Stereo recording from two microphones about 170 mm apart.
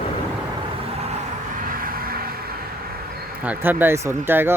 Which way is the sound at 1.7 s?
55° right (ahead or behind).